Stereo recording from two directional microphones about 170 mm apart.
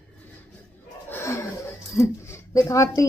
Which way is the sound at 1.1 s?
15° left (ahead or behind).